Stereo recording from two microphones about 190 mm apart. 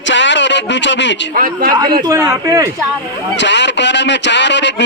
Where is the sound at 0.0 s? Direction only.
75° left (ahead or behind).